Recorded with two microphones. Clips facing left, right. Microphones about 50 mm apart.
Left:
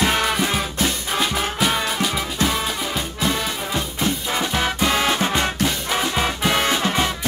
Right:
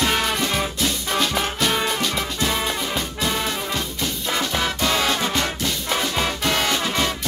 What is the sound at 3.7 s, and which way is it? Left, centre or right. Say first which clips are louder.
Music: left 3 dB; centre.